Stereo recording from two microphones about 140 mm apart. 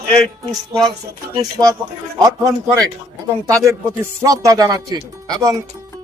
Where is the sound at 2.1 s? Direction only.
25° right (ahead or behind).